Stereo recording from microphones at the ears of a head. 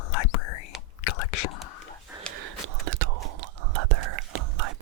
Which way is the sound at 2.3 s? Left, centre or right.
Right.